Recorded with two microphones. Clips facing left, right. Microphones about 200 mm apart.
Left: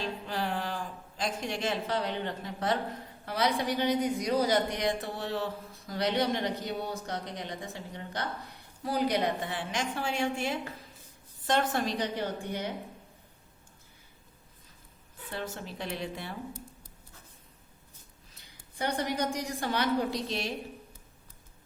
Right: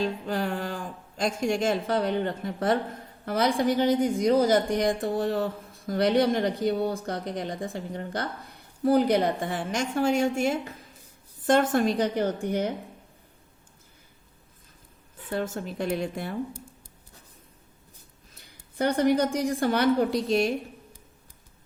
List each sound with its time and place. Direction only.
0.3 s a woman's voice: 45° right (ahead or behind)
15.3 s a woman's voice: 50° right (ahead or behind)
18.9 s a woman's voice: 55° right (ahead or behind)